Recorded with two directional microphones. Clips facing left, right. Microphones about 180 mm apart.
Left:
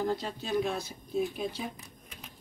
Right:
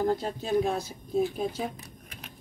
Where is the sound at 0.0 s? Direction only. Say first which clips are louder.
Right 4 dB; 45° right (ahead or behind).